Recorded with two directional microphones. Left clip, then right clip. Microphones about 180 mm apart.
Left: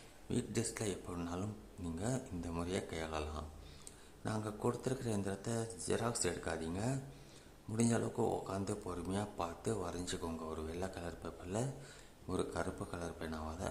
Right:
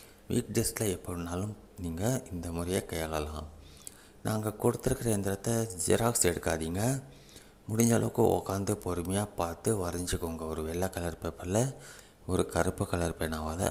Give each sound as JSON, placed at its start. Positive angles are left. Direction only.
{"t": 0.3, "sound": "speech", "side_deg": -25}
{"t": 4.4, "sound": "speech", "side_deg": -25}